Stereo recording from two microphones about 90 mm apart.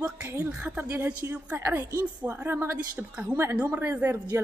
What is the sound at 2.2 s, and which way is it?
Speech, 20° right (ahead or behind).